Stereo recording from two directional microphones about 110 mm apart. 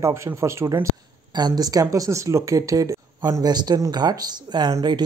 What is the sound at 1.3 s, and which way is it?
Speech, 40° right (ahead or behind).